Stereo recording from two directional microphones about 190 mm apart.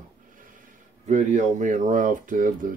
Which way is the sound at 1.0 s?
40° right (ahead or behind).